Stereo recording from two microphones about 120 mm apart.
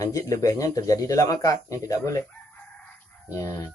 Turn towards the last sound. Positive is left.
turn(degrees=30)  # may be behind; listen again after turning